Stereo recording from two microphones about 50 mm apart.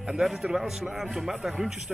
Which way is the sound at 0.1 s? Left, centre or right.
Centre.